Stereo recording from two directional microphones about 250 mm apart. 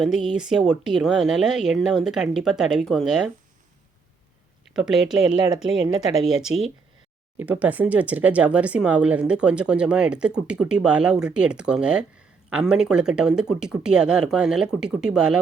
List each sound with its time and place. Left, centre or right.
0.0 s speech: centre
4.7 s speech: centre
5.6 s speech: right
6.2 s speech: centre